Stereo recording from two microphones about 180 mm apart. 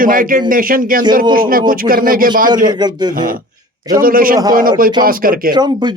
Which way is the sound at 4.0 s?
50° right (ahead or behind).